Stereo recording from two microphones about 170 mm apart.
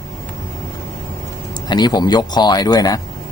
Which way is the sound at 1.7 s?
25° left (ahead or behind).